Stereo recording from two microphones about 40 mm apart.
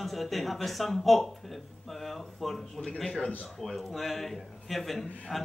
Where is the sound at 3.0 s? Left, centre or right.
Centre.